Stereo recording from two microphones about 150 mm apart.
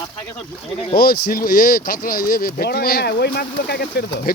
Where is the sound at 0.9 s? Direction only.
80° left.